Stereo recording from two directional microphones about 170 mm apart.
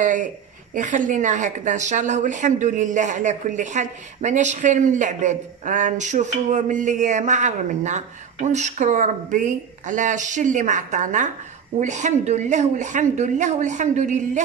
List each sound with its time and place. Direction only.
0.0 s a woman's voice: 50° right (ahead or behind)